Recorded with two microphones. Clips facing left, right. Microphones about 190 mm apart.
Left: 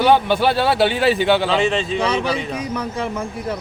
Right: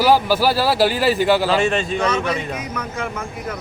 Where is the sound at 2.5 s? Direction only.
30° left (ahead or behind).